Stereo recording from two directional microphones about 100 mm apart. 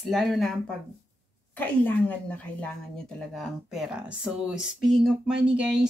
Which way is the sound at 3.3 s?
Centre (ahead or behind).